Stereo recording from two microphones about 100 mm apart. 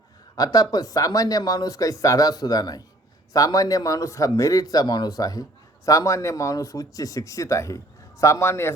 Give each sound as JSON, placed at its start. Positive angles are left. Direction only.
{"t": 0.3, "sound": "a man's voice", "side_deg": 40}